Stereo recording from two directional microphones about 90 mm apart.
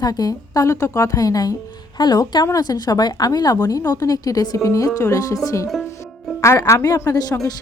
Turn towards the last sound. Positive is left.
turn(degrees=45)  # may be behind; listen again after turning